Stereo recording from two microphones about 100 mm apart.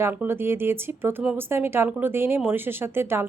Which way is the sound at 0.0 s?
20° right (ahead or behind).